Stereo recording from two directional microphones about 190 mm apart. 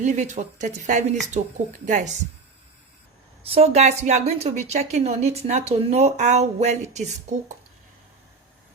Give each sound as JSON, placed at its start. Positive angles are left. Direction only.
{"t": 0.0, "sound": "a woman's voice", "side_deg": -40}
{"t": 3.4, "sound": "a woman's voice", "side_deg": -30}